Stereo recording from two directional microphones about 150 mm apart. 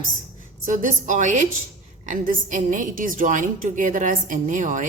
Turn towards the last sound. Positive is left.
turn(degrees=-60)  # may be behind; listen again after turning